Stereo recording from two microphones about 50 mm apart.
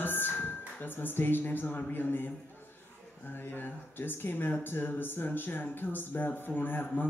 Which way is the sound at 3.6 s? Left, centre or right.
Left.